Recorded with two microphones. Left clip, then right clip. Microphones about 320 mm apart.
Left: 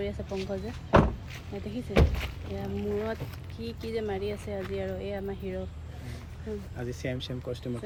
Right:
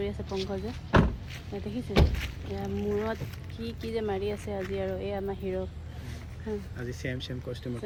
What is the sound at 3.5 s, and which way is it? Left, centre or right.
Speech, centre.